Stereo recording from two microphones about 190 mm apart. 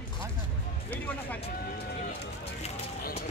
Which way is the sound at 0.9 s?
10° left (ahead or behind).